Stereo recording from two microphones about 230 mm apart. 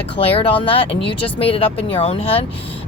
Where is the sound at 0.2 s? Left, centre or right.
Left.